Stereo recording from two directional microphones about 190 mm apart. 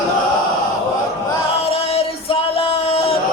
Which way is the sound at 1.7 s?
30° left (ahead or behind).